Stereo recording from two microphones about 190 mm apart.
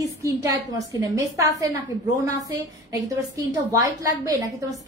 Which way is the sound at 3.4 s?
20° right (ahead or behind).